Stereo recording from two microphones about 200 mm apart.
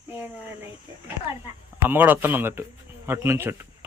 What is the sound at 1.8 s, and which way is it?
A man's voice, 10° right (ahead or behind).